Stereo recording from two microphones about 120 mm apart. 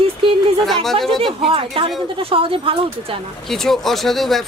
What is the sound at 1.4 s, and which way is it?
Speech, 50° right (ahead or behind).